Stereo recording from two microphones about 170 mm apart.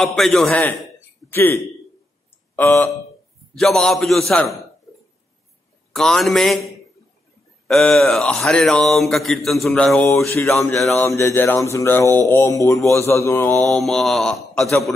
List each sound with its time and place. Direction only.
0.0 s mantra: centre (ahead or behind)
1.3 s a man's voice: 10° left (ahead or behind)
3.5 s mantra: centre (ahead or behind)
5.9 s mantra: centre (ahead or behind)
10.2 s mantra: 15° left (ahead or behind)
13.7 s mantra: centre (ahead or behind)